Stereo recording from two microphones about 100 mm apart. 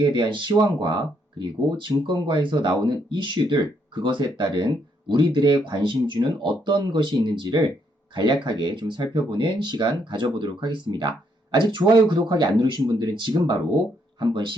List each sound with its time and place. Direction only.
0.0 s speech: 50° right (ahead or behind)